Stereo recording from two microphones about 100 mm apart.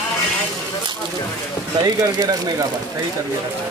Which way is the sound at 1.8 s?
40° right (ahead or behind).